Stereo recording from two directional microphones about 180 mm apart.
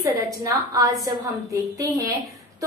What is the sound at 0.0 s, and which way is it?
A woman's voice, 20° right (ahead or behind).